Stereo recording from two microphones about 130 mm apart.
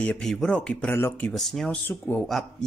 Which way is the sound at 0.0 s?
5° left (ahead or behind).